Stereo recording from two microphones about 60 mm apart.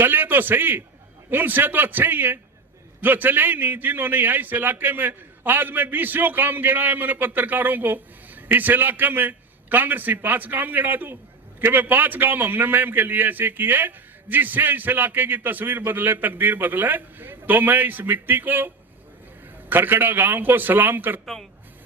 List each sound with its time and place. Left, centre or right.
0.0 s a man's voice: right
19.7 s a man's voice: right